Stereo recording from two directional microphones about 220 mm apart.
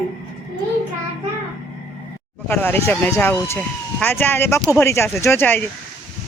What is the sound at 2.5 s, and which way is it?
Speech, 10° left (ahead or behind).